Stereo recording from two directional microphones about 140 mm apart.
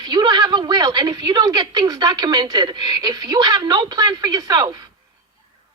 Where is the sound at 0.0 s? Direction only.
30° right (ahead or behind).